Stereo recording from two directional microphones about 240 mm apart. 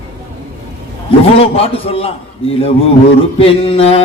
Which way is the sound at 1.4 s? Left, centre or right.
Left.